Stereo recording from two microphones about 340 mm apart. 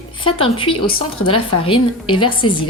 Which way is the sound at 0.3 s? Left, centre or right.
Centre.